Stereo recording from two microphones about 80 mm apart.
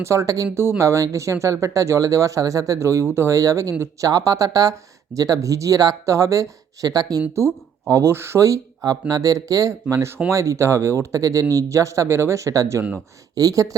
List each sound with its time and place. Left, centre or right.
0.0 s speech: right
0.5 s speech: right
7.3 s speech: right
8.8 s speech: right